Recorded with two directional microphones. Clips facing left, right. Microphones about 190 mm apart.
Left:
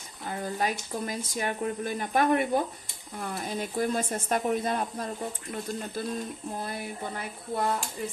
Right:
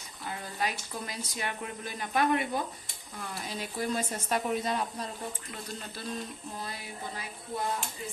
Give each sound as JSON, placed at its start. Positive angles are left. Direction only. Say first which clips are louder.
{"t": 0.3, "sound": "speech", "louder": "left 5 dB", "side_deg": 45}